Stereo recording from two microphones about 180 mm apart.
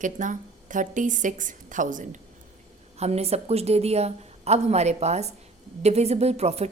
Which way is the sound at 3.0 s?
35° right (ahead or behind).